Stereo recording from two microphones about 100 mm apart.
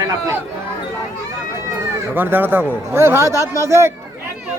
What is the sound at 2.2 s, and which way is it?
A man's voice, 20° right (ahead or behind).